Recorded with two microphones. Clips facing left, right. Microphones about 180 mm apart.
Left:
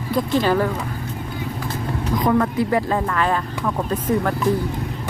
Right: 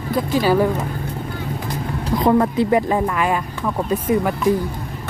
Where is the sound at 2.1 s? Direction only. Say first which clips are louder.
Right 3 dB; 25° right (ahead or behind); by 4.6 s 10° right (ahead or behind).